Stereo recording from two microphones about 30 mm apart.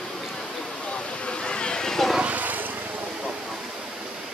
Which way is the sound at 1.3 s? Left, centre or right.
Left.